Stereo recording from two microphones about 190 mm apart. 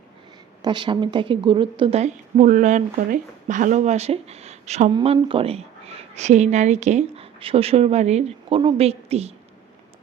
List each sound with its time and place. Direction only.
0.6 s a woman's voice: 25° right (ahead or behind)